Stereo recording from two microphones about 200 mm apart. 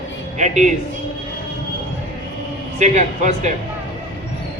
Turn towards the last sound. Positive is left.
turn(degrees=-35)  # may be behind; listen again after turning